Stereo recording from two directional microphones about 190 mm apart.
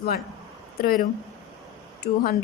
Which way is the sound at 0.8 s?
50° left (ahead or behind).